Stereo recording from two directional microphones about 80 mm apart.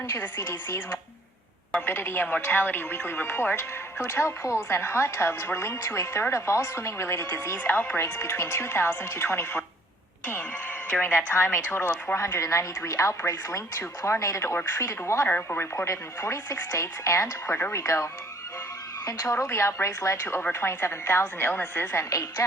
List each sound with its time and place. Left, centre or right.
0.1 s speech: left
7.6 s speech: left
11.0 s speech: left
15.3 s speech: left
22.1 s a woman's voice: left